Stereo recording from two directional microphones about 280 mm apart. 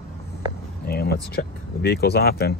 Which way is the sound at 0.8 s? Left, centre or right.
Left.